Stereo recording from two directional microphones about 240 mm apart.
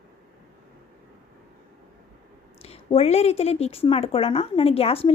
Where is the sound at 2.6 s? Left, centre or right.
Left.